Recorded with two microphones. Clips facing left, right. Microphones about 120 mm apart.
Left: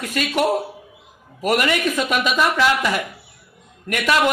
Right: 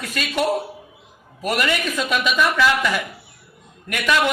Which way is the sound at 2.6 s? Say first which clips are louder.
Even; 25° left (ahead or behind).